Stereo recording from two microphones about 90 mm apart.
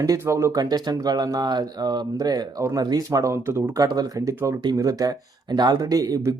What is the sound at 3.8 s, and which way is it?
Speech, 45° right (ahead or behind).